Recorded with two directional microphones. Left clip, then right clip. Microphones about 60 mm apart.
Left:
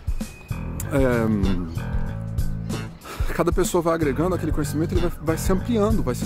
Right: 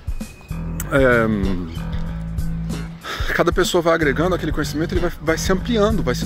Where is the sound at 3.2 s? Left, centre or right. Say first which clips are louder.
Right 5 dB; centre.